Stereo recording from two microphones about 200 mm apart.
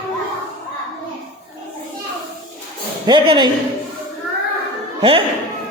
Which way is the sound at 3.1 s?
25° right (ahead or behind).